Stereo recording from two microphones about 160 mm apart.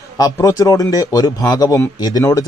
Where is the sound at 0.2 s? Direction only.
20° left (ahead or behind).